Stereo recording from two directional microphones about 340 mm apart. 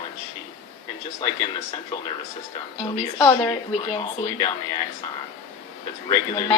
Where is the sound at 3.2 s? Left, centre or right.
Centre.